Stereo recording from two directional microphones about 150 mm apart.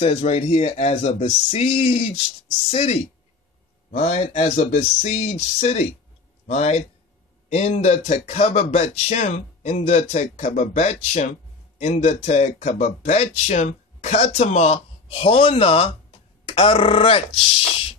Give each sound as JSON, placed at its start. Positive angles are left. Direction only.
{"t": 0.2, "sound": "speech", "side_deg": 45}
{"t": 16.4, "sound": "grunt", "side_deg": 35}